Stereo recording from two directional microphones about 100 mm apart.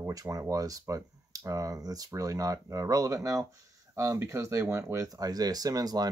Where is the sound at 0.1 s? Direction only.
35° right (ahead or behind).